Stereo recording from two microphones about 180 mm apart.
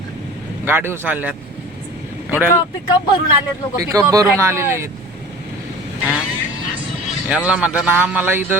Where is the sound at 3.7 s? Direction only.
20° right (ahead or behind).